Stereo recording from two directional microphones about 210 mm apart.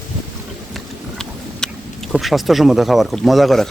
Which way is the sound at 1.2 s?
Centre (ahead or behind).